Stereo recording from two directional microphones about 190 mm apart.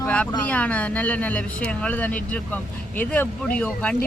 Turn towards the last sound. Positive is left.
turn(degrees=5)  # may be behind; listen again after turning